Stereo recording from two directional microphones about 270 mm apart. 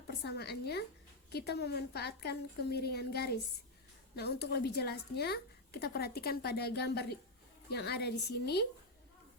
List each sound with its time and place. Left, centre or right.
0.1 s a woman's voice: left